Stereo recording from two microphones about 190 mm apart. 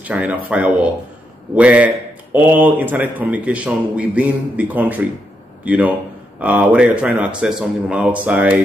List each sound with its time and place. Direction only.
0.0 s a man's voice: 5° right (ahead or behind)